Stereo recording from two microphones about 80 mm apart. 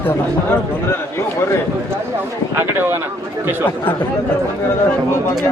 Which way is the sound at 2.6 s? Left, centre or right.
Right.